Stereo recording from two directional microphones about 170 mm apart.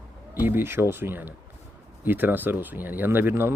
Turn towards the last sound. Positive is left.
turn(degrees=-10)  # may be behind; listen again after turning